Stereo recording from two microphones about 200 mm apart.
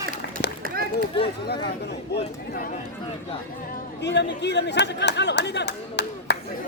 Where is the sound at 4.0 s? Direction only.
60° left (ahead or behind).